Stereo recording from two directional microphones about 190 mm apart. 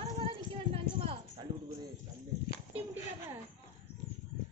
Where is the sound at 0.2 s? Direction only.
30° right (ahead or behind).